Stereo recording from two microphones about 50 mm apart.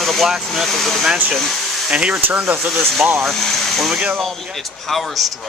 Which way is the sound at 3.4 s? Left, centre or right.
Centre.